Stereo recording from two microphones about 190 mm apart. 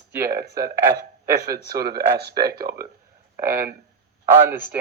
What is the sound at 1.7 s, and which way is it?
Speech, 55° right (ahead or behind).